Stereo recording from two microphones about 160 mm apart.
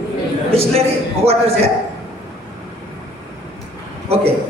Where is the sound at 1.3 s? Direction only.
40° right (ahead or behind).